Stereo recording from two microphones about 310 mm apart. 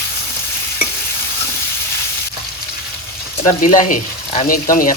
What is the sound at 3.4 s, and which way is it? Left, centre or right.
Frying, left.